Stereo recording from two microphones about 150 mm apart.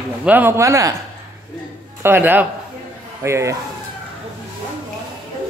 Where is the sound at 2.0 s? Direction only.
15° right (ahead or behind).